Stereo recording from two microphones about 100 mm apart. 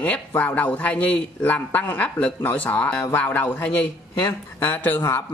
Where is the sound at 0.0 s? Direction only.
15° left (ahead or behind).